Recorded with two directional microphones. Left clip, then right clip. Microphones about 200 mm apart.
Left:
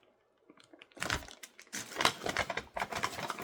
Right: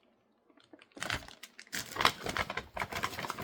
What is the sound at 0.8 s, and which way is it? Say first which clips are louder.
Computer keyboard: left 1 dB; 20° left (ahead or behind).